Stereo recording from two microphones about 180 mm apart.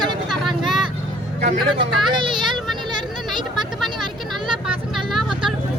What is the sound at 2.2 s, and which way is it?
Vehicle, 25° right (ahead or behind).